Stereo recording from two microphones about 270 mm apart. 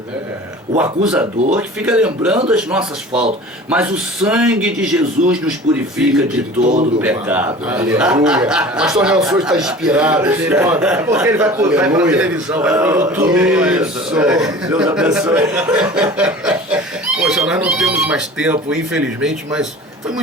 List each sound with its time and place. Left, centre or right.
0.8 s a man's voice: centre
6.6 s speech: right
7.0 s a man's voice: centre